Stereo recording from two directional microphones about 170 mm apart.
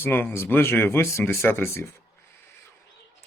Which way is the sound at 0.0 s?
10° left (ahead or behind).